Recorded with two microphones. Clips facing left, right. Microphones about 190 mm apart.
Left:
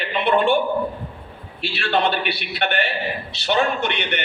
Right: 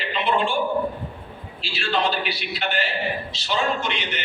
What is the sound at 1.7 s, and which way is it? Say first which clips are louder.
A man's voice: left 3 dB; 65° left (ahead or behind).